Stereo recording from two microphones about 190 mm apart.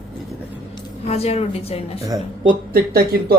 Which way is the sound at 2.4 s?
50° right (ahead or behind).